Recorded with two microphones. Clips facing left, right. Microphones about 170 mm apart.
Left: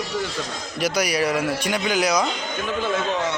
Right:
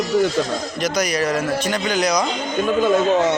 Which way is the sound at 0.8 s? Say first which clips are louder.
Even; 10° left (ahead or behind).